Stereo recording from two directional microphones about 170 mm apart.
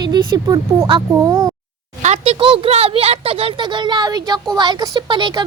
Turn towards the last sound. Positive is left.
turn(degrees=-30)  # may be behind; listen again after turning